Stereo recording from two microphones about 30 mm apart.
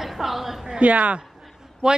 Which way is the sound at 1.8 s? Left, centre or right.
Right.